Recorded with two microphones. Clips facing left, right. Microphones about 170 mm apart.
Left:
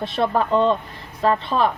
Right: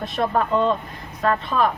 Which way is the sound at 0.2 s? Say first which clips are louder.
Left 2 dB; 15° left (ahead or behind).